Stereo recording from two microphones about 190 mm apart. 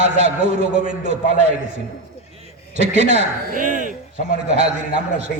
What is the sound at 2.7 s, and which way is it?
A man's voice, 35° right (ahead or behind).